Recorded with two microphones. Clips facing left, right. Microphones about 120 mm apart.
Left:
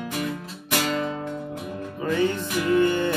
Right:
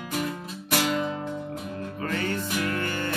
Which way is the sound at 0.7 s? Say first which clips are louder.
Even; 5° right (ahead or behind).